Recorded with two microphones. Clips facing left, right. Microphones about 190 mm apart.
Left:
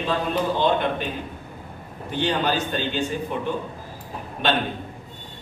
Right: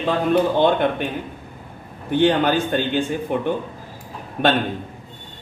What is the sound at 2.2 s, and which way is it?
A man's voice, 55° right (ahead or behind).